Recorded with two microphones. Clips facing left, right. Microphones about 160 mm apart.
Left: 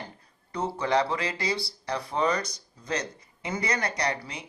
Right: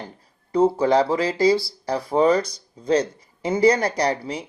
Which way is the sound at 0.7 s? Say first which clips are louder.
Right 7 dB; 30° right (ahead or behind).